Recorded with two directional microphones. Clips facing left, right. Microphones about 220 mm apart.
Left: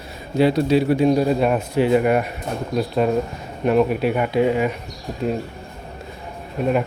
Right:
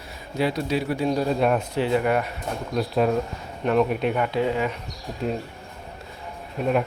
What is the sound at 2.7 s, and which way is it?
Speech, centre (ahead or behind).